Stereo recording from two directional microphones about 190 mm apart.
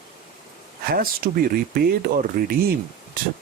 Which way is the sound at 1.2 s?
55° right (ahead or behind).